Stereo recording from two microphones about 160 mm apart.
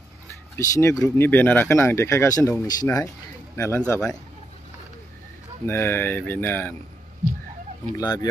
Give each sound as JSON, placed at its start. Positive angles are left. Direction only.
{"t": 0.6, "sound": "speech", "side_deg": 20}
{"t": 5.7, "sound": "speech", "side_deg": 15}
{"t": 7.9, "sound": "speech", "side_deg": 25}